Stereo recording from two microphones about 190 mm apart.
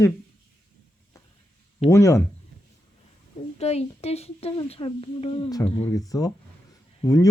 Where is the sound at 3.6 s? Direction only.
35° left (ahead or behind).